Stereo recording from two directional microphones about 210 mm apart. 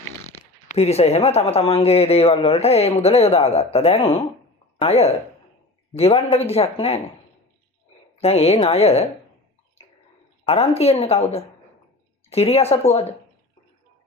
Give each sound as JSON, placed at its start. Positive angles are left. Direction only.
{"t": 0.3, "sound": "speech", "side_deg": 30}
{"t": 8.2, "sound": "speech", "side_deg": 30}
{"t": 10.4, "sound": "speech", "side_deg": 30}